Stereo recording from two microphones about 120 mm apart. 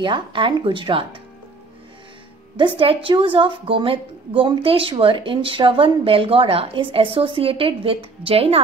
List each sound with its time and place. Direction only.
0.0 s a woman's voice: 45° right (ahead or behind)
2.5 s a woman's voice: 45° right (ahead or behind)